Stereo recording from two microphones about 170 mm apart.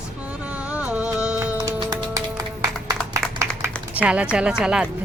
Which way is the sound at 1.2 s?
5° right (ahead or behind).